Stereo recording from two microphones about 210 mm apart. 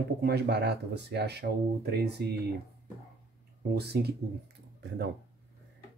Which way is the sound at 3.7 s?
50° right (ahead or behind).